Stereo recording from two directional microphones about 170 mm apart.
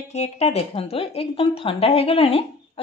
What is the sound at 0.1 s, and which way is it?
Speech, 40° left (ahead or behind).